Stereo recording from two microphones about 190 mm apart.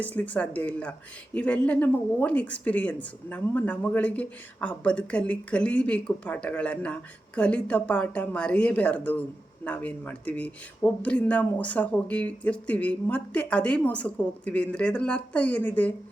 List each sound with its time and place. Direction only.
0.0 s speech: 10° left (ahead or behind)